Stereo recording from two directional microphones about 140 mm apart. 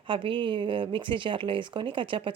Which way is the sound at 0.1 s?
35° right (ahead or behind).